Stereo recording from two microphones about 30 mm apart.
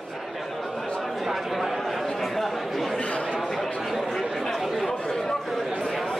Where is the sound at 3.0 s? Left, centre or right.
Left.